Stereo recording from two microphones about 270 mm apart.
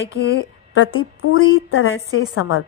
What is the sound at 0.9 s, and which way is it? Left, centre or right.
A woman's voice, left.